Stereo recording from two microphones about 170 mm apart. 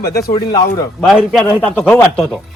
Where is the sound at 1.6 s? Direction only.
10° left (ahead or behind).